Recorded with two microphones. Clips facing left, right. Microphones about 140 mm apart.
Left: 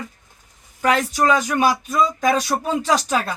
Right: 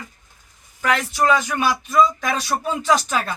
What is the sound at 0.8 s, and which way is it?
Speech, 35° left (ahead or behind).